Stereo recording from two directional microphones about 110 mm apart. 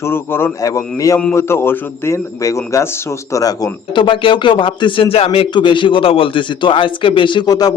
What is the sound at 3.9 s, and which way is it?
A man's voice, 45° left (ahead or behind).